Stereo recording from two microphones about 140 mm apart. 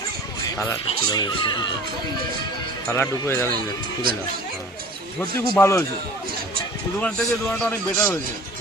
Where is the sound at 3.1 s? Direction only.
20° left (ahead or behind).